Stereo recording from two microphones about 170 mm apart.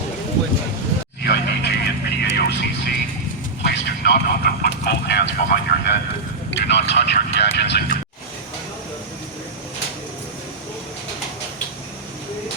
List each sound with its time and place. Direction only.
1.2 s vehicle: 70° left (ahead or behind)
6.7 s speech: 90° left